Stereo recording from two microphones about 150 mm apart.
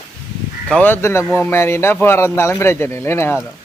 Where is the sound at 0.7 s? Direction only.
10° left (ahead or behind).